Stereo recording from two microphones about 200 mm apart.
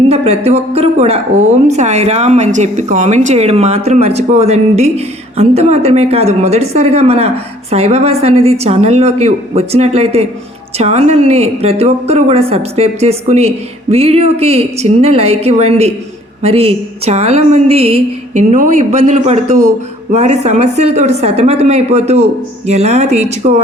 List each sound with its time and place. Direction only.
0.1 s speech: 30° right (ahead or behind)